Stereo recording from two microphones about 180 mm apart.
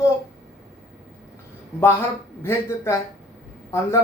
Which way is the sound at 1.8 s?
15° left (ahead or behind).